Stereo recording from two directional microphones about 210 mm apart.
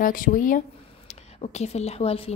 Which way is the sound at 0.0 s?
40° left (ahead or behind).